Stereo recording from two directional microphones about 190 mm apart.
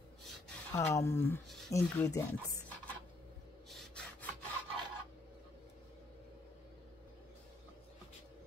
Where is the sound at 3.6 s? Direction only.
5° left (ahead or behind).